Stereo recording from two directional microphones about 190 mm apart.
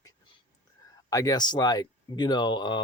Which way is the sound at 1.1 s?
20° left (ahead or behind).